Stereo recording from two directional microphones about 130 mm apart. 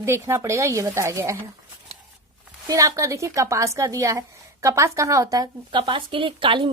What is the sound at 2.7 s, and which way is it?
A woman's voice, 25° right (ahead or behind).